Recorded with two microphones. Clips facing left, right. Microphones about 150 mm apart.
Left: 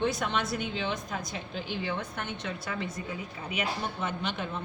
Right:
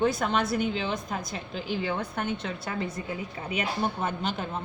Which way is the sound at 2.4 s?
55° right (ahead or behind).